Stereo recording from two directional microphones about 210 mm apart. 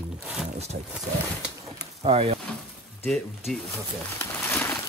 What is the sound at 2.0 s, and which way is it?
Speech, 30° right (ahead or behind).